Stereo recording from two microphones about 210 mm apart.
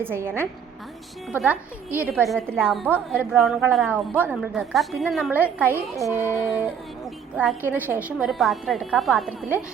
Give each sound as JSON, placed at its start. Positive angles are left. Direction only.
{"t": 0.0, "sound": "a woman's voice", "side_deg": -10}